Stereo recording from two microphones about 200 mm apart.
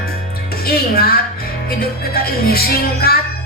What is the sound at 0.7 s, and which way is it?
Music, 50° left (ahead or behind).